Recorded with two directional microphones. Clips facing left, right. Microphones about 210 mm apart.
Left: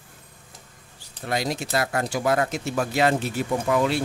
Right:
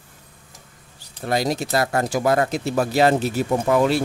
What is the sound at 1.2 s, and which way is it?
Speech, 40° right (ahead or behind).